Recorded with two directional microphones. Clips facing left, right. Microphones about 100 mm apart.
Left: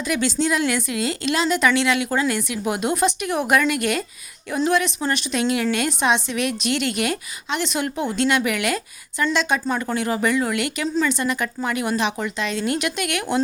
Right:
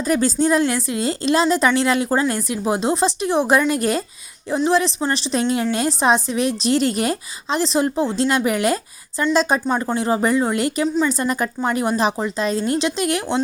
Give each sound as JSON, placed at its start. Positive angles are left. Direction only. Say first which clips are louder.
{"t": 0.1, "sound": "a woman's voice", "louder": "right 4 dB", "side_deg": -40}
{"t": 9.6, "sound": "a woman's voice", "louder": "right 3 dB", "side_deg": -25}
{"t": 10.8, "sound": "a woman's voice", "louder": "even", "side_deg": -15}
{"t": 11.1, "sound": "a woman's voice", "louder": "right 2 dB", "side_deg": -40}